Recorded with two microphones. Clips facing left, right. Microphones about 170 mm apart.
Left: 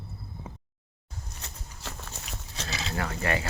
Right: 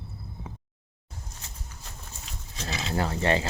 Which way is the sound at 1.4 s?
75° left (ahead or behind).